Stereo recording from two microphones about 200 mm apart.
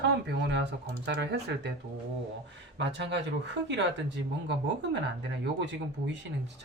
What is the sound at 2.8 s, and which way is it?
Speech, 60° right (ahead or behind).